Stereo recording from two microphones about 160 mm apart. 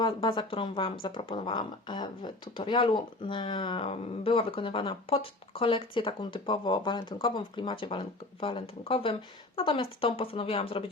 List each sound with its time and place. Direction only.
0.0 s speech: 30° left (ahead or behind)